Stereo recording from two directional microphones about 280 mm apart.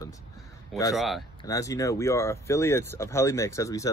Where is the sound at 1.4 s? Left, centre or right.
Centre.